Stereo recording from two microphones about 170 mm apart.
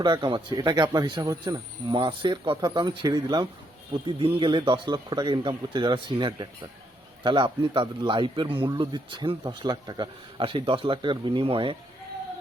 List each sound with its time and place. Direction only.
0.0 s a man's voice: 25° right (ahead or behind)